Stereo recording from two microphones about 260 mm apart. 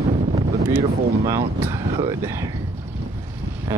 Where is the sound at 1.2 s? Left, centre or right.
Centre.